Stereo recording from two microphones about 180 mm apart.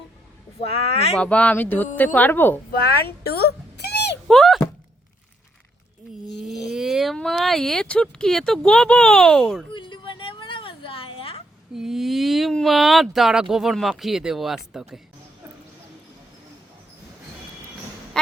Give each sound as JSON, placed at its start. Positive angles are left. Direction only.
{"t": 0.6, "sound": "speech", "side_deg": 35}
{"t": 1.2, "sound": "speech", "side_deg": 5}
{"t": 2.9, "sound": "cat", "side_deg": 60}
{"t": 4.3, "sound": "thunk", "side_deg": 0}
{"t": 6.2, "sound": "speech", "side_deg": 0}
{"t": 9.7, "sound": "a sound", "side_deg": 25}
{"t": 11.7, "sound": "speech", "side_deg": 0}